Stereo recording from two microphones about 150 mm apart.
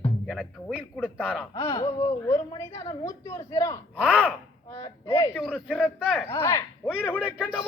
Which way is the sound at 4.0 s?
10° right (ahead or behind).